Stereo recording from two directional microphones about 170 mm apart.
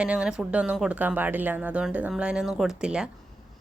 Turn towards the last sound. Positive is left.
turn(degrees=-5)  # may be behind; listen again after turning